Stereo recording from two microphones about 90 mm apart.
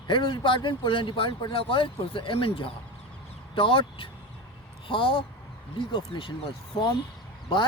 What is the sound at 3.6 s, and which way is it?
Speech, 75° left (ahead or behind).